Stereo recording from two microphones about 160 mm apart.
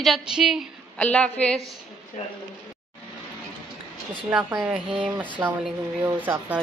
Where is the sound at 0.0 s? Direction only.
Centre (ahead or behind).